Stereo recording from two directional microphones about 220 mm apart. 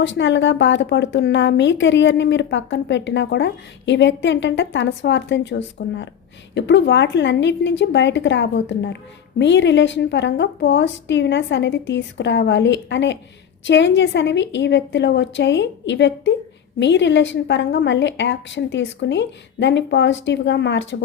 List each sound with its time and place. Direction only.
0.0 s a woman's voice: 55° left (ahead or behind)